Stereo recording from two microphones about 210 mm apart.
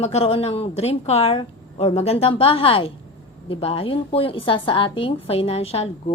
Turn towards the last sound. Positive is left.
turn(degrees=30)  # may be behind; listen again after turning